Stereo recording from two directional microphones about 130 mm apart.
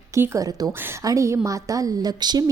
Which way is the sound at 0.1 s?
25° right (ahead or behind).